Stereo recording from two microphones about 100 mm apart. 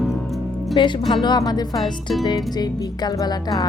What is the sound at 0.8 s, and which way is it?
Speech, 50° left (ahead or behind).